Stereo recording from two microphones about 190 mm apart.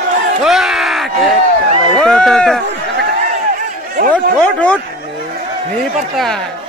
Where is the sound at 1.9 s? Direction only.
Centre (ahead or behind).